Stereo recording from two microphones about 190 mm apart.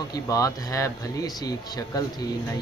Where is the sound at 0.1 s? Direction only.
20° left (ahead or behind).